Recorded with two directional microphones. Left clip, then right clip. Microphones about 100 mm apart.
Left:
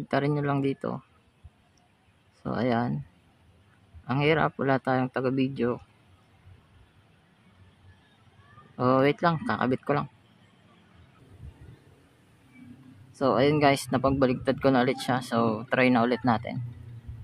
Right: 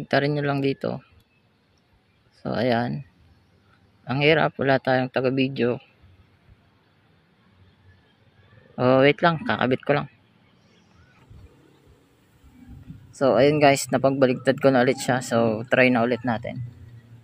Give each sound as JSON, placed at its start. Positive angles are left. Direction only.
{"t": 0.1, "sound": "speech", "side_deg": -10}
{"t": 2.4, "sound": "speech", "side_deg": -10}
{"t": 4.0, "sound": "speech", "side_deg": -10}
{"t": 8.7, "sound": "speech", "side_deg": -15}
{"t": 13.1, "sound": "speech", "side_deg": -25}
{"t": 15.9, "sound": "speech", "side_deg": -10}